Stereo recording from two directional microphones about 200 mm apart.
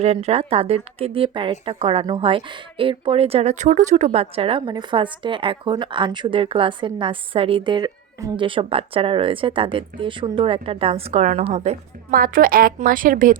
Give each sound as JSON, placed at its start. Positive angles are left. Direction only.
{"t": 0.0, "sound": "a woman's voice", "side_deg": -30}
{"t": 12.1, "sound": "a woman's voice", "side_deg": -45}